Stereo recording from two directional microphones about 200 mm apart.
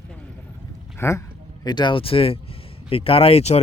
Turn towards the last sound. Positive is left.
turn(degrees=30)  # may be behind; listen again after turning